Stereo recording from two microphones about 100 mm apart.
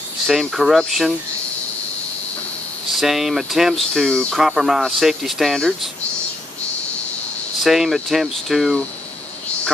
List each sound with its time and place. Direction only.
0.3 s speech: centre (ahead or behind)
2.9 s speech: centre (ahead or behind)
7.6 s speech: centre (ahead or behind)